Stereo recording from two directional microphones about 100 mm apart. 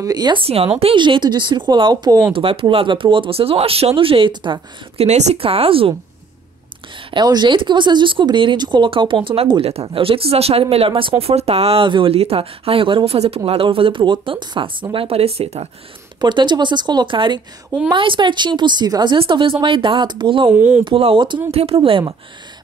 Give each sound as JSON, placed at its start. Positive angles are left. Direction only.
{"t": 0.0, "sound": "a woman's voice", "side_deg": -40}
{"t": 0.4, "sound": "speech", "side_deg": -85}
{"t": 0.9, "sound": "speech", "side_deg": -50}
{"t": 2.3, "sound": "speech", "side_deg": -65}
{"t": 4.3, "sound": "speech", "side_deg": -50}
{"t": 4.9, "sound": "speech", "side_deg": -85}
{"t": 7.2, "sound": "speech", "side_deg": -50}
{"t": 9.6, "sound": "speech", "side_deg": -80}
{"t": 13.5, "sound": "speech", "side_deg": -65}
{"t": 16.2, "sound": "speech", "side_deg": -50}
{"t": 19.1, "sound": "speech", "side_deg": -60}
{"t": 20.5, "sound": "speech", "side_deg": -15}
{"t": 20.8, "sound": "speech", "side_deg": -65}
{"t": 21.5, "sound": "speech", "side_deg": -75}